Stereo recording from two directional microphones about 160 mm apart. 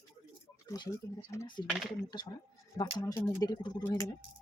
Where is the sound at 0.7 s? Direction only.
25° left (ahead or behind).